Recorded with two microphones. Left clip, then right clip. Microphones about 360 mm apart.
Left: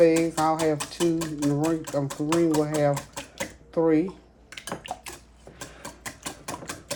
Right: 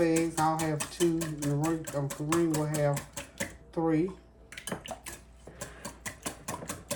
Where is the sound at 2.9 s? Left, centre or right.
Centre.